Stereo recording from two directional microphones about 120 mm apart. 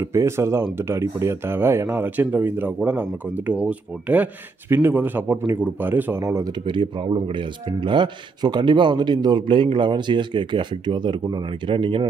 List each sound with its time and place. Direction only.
0.0 s speech: 25° right (ahead or behind)
6.6 s speech: 40° right (ahead or behind)